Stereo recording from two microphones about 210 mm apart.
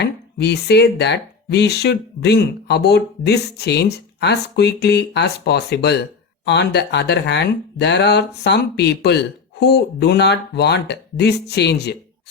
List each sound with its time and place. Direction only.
0.0 s speech: 50° left (ahead or behind)